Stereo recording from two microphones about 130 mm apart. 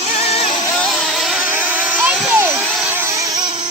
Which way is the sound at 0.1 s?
55° left (ahead or behind).